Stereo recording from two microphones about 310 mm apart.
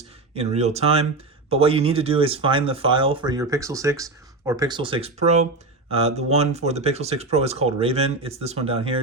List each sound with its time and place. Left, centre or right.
0.3 s speech: right